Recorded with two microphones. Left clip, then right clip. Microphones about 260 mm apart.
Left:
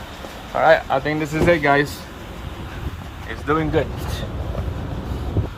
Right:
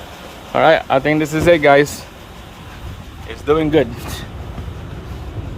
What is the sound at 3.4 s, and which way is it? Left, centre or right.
Speech, right.